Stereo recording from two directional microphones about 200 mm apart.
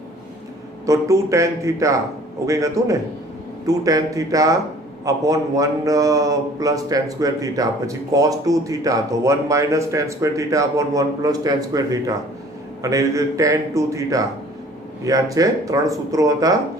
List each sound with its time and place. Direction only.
0.9 s speech: 15° right (ahead or behind)